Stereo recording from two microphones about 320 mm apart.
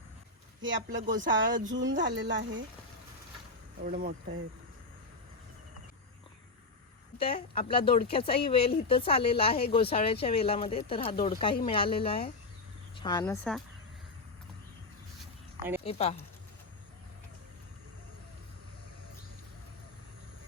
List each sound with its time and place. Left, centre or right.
0.6 s speech: right
1.0 s speech: right
1.3 s speech: right
3.8 s speech: right
7.2 s speech: centre
15.8 s speech: centre